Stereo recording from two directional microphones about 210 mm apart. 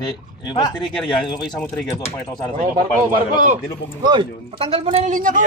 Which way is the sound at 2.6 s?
35° right (ahead or behind).